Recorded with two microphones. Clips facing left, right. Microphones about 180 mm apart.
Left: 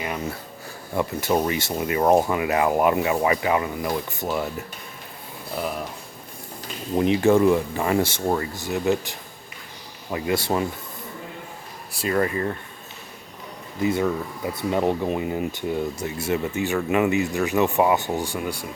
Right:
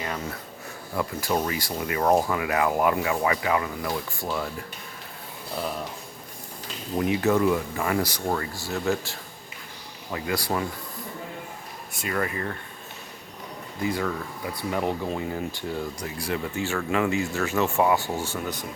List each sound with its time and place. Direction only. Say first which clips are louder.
0.9 s speech: left 4 dB; 25° left (ahead or behind)
7.0 s speech: left 5 dB; 30° left (ahead or behind)
11.9 s speech: left 6 dB; 30° left (ahead or behind)
13.8 s speech: left 5 dB; 25° left (ahead or behind)